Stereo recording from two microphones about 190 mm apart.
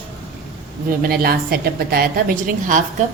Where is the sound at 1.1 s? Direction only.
55° right (ahead or behind).